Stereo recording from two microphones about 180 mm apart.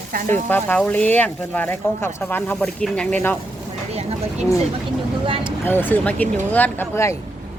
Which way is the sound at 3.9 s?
35° right (ahead or behind).